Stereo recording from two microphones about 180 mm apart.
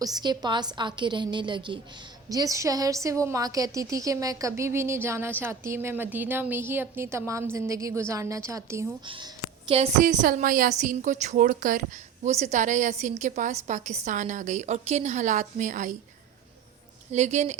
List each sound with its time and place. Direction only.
0.0 s a woman's voice: 20° right (ahead or behind)
9.0 s a woman's voice: 30° right (ahead or behind)
10.0 s a woman's voice: 45° right (ahead or behind)
17.1 s a woman's voice: 40° right (ahead or behind)